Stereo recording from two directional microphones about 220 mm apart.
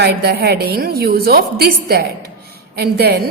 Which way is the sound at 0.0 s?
50° right (ahead or behind).